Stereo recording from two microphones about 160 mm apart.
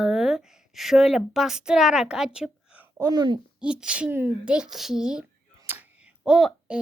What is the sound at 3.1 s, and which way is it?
Speech, 30° right (ahead or behind).